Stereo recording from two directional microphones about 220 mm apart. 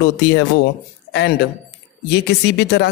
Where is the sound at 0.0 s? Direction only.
50° left (ahead or behind).